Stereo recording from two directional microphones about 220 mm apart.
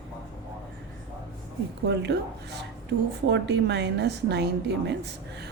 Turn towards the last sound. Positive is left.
turn(degrees=-50)  # may be behind; listen again after turning